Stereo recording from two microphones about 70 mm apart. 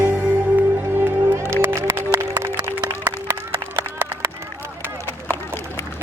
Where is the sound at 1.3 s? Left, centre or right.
Right.